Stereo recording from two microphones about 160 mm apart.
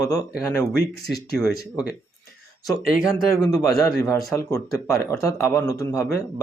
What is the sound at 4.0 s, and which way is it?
A man's voice, 20° left (ahead or behind).